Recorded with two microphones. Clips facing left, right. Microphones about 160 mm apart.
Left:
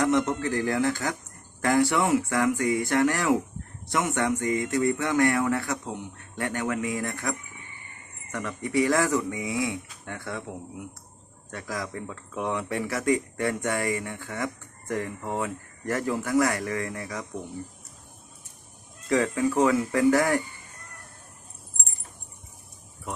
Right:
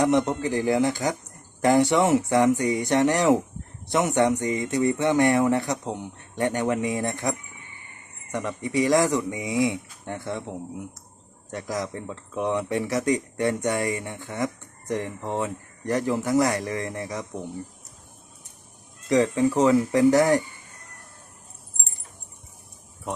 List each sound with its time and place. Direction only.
0.0 s speech: 15° right (ahead or behind)
11.8 s speech: 25° right (ahead or behind)
19.0 s speech: 20° right (ahead or behind)